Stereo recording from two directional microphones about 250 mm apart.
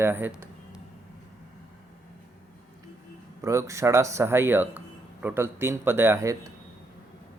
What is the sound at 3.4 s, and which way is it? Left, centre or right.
Speech, centre.